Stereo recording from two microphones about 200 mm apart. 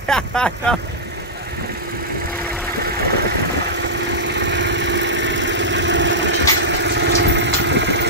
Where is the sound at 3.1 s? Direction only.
55° right (ahead or behind).